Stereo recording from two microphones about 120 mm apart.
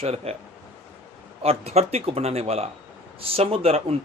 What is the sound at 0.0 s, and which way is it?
Speech, 60° right (ahead or behind).